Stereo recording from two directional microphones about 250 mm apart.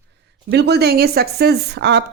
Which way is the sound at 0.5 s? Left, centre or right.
Right.